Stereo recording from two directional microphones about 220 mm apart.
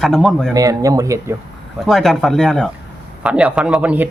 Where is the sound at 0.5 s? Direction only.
15° right (ahead or behind).